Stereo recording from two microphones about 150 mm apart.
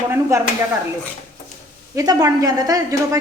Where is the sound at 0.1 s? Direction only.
20° right (ahead or behind).